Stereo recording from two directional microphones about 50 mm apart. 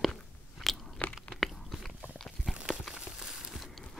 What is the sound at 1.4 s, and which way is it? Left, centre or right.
Biting, centre.